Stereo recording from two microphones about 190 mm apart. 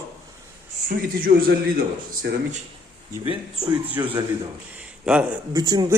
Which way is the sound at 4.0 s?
15° right (ahead or behind).